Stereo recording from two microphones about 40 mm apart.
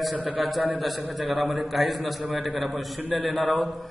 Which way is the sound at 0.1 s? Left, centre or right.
Right.